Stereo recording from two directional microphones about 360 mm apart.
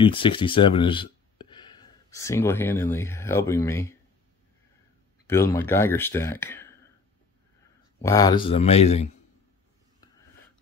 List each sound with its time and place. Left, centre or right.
0.0 s speech: centre
5.2 s speech: centre
8.0 s speech: centre